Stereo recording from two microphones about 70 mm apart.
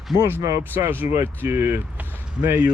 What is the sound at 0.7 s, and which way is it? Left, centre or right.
Speech, right.